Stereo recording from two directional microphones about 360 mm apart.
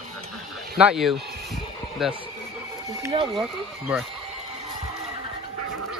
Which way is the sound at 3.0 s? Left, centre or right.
Centre.